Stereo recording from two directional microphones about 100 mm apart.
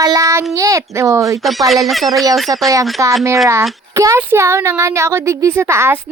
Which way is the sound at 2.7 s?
35° right (ahead or behind).